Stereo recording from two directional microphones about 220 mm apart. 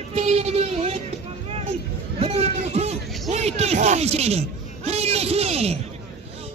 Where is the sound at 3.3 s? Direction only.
30° right (ahead or behind).